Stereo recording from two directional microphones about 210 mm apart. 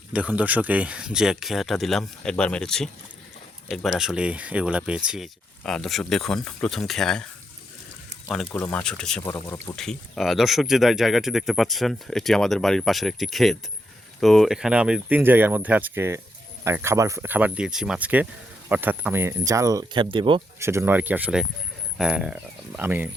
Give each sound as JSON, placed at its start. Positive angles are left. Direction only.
{"t": 0.1, "sound": "speech", "side_deg": -5}
{"t": 8.5, "sound": "speech", "side_deg": 10}
{"t": 9.7, "sound": "speech", "side_deg": 0}
{"t": 20.7, "sound": "speech", "side_deg": -10}